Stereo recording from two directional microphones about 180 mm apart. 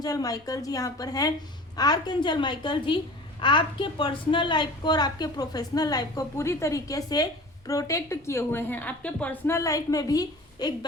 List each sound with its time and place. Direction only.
0.0 s a woman's voice: 20° left (ahead or behind)